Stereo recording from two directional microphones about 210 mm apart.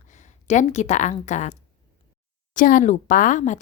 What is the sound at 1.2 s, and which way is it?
Speech, 35° left (ahead or behind).